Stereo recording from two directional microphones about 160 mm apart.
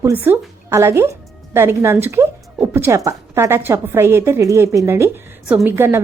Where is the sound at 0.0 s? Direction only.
15° right (ahead or behind).